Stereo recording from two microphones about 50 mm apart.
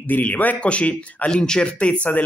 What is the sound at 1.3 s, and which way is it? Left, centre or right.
Speech, centre.